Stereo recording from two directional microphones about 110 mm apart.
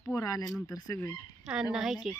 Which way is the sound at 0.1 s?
30° left (ahead or behind).